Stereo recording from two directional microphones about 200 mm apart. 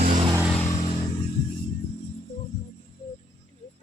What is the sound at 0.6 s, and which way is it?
Vehicle, 35° left (ahead or behind).